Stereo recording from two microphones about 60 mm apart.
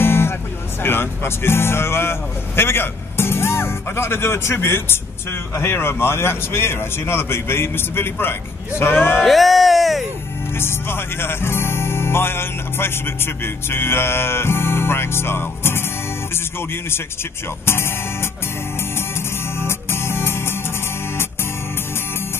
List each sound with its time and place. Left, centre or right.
0.0 s music: left
0.8 s speech: left
5.5 s music: left
9.2 s speech: centre
10.6 s music: left
17.6 s music: left
19.6 s music: left